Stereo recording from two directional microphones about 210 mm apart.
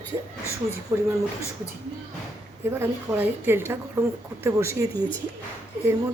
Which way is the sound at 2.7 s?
10° right (ahead or behind).